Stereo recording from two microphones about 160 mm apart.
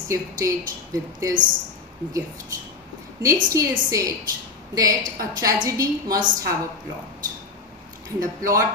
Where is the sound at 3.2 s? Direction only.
20° right (ahead or behind).